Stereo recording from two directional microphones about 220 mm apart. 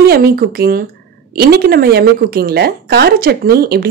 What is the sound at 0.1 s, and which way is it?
A woman's voice, 45° right (ahead or behind).